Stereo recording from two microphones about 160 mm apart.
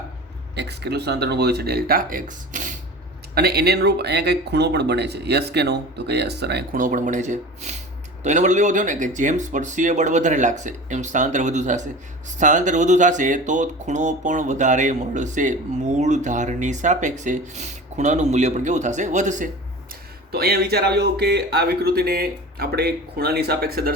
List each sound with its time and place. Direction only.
0.5 s speech: 90° right; by 2.7 s 55° right (ahead or behind)
3.3 s speech: 80° right
6.7 s speech: 55° right (ahead or behind)
20.3 s speech: 75° right (ahead or behind)